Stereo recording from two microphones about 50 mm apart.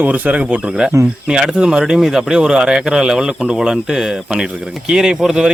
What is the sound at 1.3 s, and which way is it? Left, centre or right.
Speech, centre.